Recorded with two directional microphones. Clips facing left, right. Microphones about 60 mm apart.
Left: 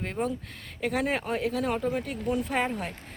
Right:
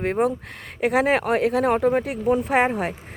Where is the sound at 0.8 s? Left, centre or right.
Right.